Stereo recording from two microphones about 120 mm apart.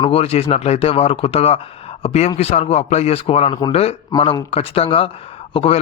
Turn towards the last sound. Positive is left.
turn(degrees=50)  # may be behind; listen again after turning